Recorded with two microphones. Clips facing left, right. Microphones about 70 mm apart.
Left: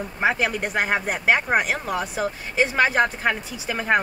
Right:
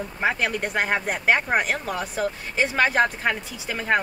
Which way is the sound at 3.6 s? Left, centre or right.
Centre.